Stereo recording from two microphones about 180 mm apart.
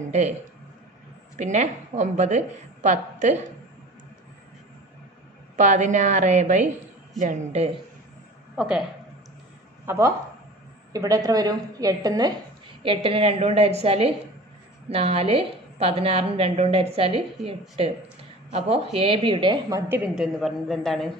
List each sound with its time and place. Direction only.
1.4 s a woman's voice: 40° right (ahead or behind)
5.6 s a woman's voice: 40° right (ahead or behind)
9.8 s a woman's voice: 15° right (ahead or behind)
19.9 s a woman's voice: centre (ahead or behind)